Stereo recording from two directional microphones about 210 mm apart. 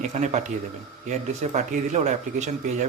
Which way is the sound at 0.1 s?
35° right (ahead or behind).